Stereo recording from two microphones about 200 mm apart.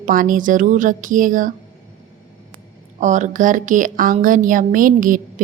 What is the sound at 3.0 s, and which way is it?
A woman's voice, 40° right (ahead or behind).